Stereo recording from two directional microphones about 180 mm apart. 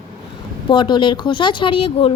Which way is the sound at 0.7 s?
25° left (ahead or behind).